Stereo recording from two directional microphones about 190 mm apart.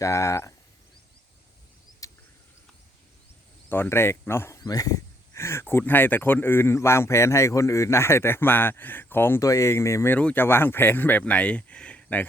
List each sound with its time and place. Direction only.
0.0 s speech: 15° left (ahead or behind)
2.0 s a sound: 15° left (ahead or behind)
3.7 s speech: 10° left (ahead or behind)